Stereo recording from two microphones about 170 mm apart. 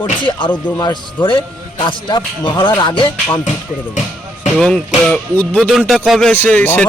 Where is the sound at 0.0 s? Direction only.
30° left (ahead or behind).